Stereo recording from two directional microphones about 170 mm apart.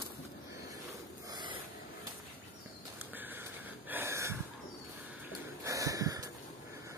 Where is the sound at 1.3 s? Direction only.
25° right (ahead or behind).